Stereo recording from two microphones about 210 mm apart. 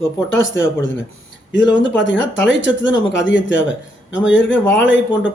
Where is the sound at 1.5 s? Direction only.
60° left (ahead or behind).